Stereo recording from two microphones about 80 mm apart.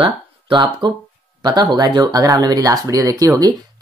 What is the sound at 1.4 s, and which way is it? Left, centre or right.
Speech, right.